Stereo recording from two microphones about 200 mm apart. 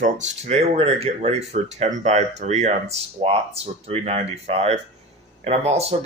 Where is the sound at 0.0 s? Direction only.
30° right (ahead or behind).